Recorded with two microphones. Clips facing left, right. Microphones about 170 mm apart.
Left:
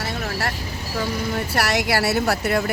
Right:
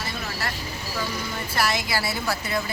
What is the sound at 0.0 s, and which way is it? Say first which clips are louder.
Vehicle: left 5 dB; 70° left (ahead or behind).